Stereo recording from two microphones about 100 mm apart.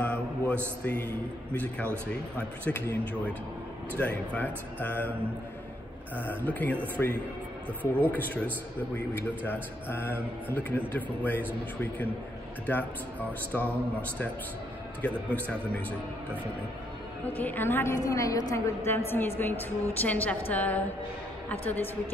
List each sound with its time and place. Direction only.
0.0 s a sound: 15° left (ahead or behind)
1.5 s a man's voice: 15° left (ahead or behind)
6.1 s a man's voice: 15° left (ahead or behind)
15.0 s a man's voice: 15° left (ahead or behind)
17.4 s a man's voice: 20° left (ahead or behind); by 18.6 s 35° left (ahead or behind)
18.9 s a man's voice: 20° left (ahead or behind)